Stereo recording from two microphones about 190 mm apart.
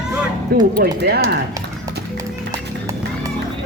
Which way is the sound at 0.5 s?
50° right (ahead or behind).